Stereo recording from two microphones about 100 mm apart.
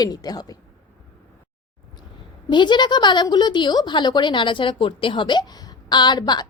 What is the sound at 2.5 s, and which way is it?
Speech, 50° left (ahead or behind).